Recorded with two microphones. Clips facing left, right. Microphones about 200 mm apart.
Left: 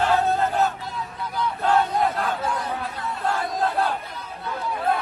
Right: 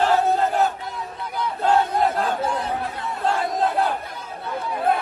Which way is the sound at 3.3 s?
20° right (ahead or behind).